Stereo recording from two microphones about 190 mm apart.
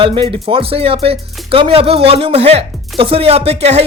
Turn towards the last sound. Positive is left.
turn(degrees=-35)  # may be behind; listen again after turning